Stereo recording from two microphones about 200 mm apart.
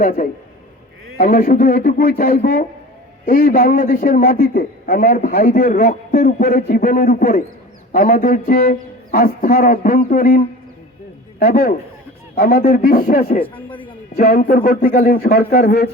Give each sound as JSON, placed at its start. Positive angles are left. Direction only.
{"t": 0.0, "sound": "a man's voice", "side_deg": 45}